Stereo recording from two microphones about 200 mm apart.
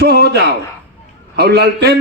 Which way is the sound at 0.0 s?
55° right (ahead or behind).